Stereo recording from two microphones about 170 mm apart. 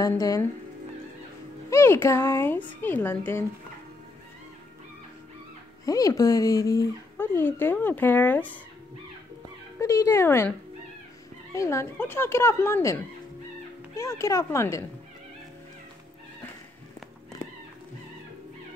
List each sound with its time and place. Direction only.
0.0 s speech: 20° left (ahead or behind)
1.7 s speech: 15° left (ahead or behind)
5.9 s speech: 20° left (ahead or behind)
9.8 s speech: 15° left (ahead or behind)
11.5 s speech: 15° left (ahead or behind)